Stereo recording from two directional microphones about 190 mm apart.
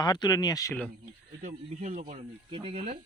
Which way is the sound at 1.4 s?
40° right (ahead or behind).